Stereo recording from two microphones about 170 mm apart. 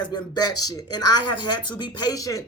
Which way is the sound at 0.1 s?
25° left (ahead or behind).